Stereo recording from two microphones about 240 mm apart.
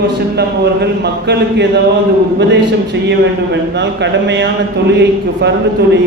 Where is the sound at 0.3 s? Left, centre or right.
Right.